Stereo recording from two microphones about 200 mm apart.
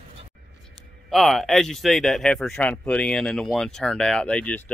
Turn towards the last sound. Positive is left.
turn(degrees=5)  # may be behind; listen again after turning